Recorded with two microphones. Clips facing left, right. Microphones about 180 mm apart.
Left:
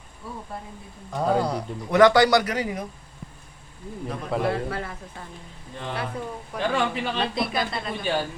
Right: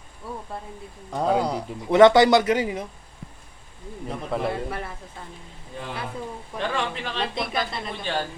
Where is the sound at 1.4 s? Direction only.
25° right (ahead or behind).